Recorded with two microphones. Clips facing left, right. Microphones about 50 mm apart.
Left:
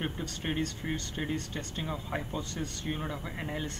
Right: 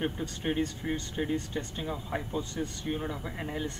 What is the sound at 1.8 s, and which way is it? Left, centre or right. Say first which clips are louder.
Speech: left 2 dB; centre.